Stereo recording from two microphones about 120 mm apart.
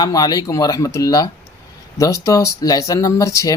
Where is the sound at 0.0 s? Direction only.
35° left (ahead or behind).